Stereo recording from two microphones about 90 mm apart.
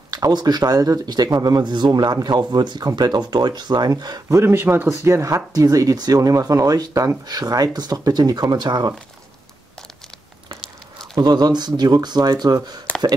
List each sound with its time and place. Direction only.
0.1 s speech: 50° right (ahead or behind)
4.4 s speech: 30° right (ahead or behind); by 8.9 s 55° right (ahead or behind)
11.1 s speech: 50° right (ahead or behind)